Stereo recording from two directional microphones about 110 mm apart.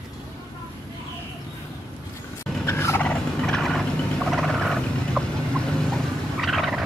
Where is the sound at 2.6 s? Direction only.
25° left (ahead or behind).